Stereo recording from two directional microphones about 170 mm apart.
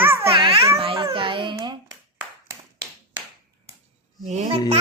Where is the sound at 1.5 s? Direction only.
25° right (ahead or behind).